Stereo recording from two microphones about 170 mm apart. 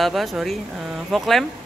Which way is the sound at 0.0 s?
Centre (ahead or behind).